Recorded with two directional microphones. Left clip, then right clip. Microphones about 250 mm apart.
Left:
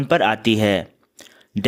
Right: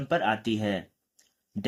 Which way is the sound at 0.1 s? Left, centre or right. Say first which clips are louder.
Left 9 dB; left.